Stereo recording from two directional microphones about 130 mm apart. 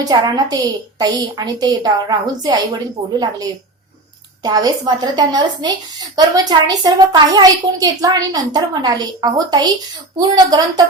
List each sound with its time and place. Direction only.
0.0 s a woman's voice: 30° right (ahead or behind)